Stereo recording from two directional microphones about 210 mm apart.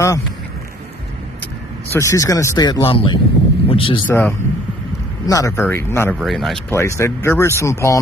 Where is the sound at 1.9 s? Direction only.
15° left (ahead or behind).